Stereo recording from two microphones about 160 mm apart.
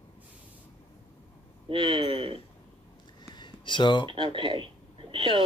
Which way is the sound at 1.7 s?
30° right (ahead or behind).